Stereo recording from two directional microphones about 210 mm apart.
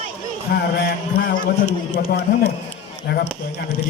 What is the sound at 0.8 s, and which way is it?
Speech, 45° left (ahead or behind).